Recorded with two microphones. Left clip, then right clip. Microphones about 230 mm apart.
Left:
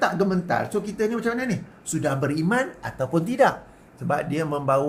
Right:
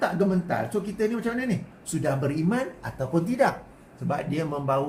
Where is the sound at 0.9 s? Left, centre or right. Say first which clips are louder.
Left 3 dB; left.